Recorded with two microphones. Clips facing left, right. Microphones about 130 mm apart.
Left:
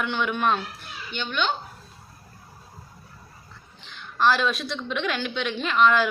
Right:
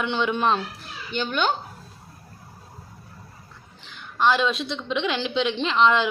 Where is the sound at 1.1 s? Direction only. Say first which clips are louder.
Right 3 dB; 40° right (ahead or behind).